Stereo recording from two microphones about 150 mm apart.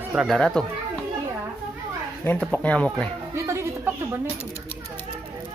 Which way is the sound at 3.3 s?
20° right (ahead or behind).